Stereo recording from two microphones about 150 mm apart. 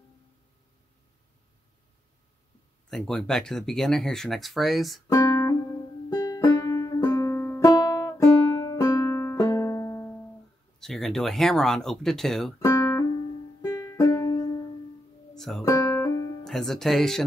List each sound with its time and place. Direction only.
2.9 s speech: 5° left (ahead or behind)
5.1 s music: 25° left (ahead or behind)
10.8 s speech: 5° left (ahead or behind)
12.5 s music: 25° left (ahead or behind)
15.3 s music: centre (ahead or behind)
15.6 s music: 20° left (ahead or behind)
16.4 s speech: centre (ahead or behind)